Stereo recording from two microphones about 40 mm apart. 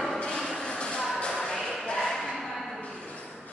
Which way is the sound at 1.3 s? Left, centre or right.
Centre.